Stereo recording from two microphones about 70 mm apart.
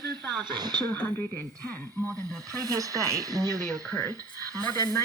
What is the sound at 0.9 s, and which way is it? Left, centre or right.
Speech, left.